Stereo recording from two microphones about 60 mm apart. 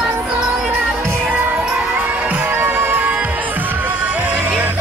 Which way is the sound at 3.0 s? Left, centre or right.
Right.